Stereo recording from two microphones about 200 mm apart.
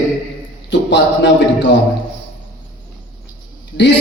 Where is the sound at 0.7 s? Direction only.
60° left (ahead or behind).